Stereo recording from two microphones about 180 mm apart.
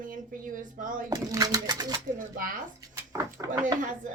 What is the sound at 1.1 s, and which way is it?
Speech, 20° right (ahead or behind).